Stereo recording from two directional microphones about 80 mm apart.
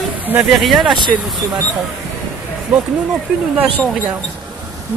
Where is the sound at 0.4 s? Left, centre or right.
Centre.